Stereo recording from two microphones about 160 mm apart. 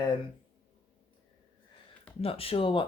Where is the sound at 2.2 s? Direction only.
35° left (ahead or behind).